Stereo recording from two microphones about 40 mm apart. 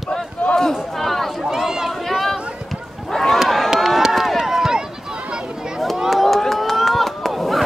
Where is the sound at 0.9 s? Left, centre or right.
Centre.